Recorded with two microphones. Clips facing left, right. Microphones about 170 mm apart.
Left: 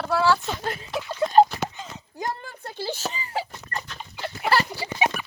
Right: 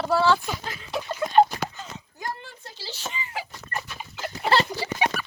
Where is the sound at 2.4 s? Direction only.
55° left (ahead or behind).